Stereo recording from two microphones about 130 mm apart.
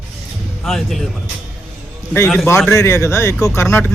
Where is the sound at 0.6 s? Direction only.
Centre (ahead or behind).